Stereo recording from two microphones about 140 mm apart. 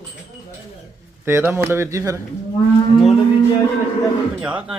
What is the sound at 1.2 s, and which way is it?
Speech, 15° right (ahead or behind).